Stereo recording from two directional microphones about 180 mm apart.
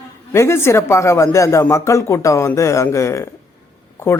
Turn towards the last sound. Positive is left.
turn(degrees=15)  # may be behind; listen again after turning